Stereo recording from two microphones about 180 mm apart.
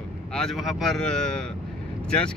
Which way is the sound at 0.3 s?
Centre (ahead or behind).